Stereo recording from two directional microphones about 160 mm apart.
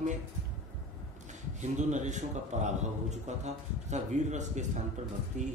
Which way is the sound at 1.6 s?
50° right (ahead or behind).